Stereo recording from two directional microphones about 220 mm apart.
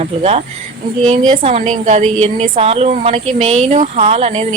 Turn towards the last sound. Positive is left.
turn(degrees=-30)  # may be behind; listen again after turning